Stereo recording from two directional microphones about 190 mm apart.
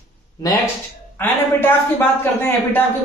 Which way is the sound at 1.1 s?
10° left (ahead or behind).